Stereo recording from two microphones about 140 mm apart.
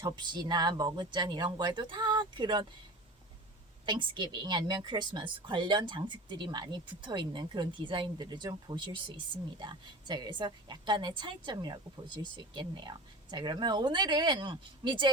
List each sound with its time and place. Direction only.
0.0 s a woman's voice: 30° right (ahead or behind)
3.8 s a woman's voice: 35° right (ahead or behind)